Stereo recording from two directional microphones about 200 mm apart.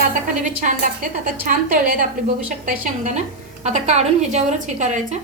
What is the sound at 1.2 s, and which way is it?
Speech, 45° right (ahead or behind).